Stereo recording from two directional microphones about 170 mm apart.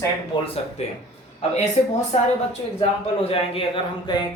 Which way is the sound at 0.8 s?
40° left (ahead or behind).